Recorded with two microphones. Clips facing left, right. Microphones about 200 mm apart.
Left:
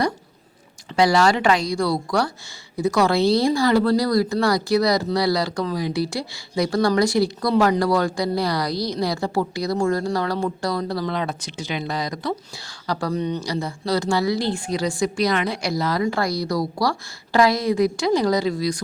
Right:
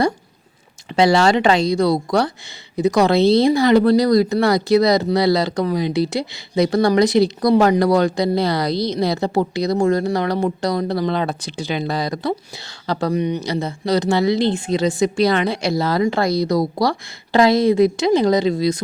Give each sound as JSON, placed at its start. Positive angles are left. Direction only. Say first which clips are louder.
{"t": 0.9, "sound": "speech", "louder": "right 3 dB", "side_deg": -25}
{"t": 13.1, "sound": "speech", "louder": "right 4 dB", "side_deg": -15}